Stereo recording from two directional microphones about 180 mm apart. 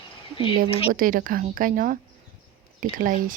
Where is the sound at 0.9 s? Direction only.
50° right (ahead or behind).